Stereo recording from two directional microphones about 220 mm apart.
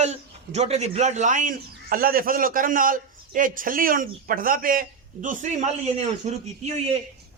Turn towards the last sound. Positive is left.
turn(degrees=-30)  # may be behind; listen again after turning